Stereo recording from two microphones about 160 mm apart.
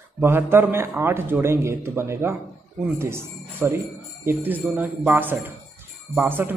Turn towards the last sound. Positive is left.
turn(degrees=-10)  # may be behind; listen again after turning